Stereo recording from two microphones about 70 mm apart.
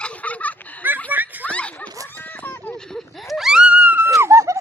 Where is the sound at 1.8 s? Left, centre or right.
Right.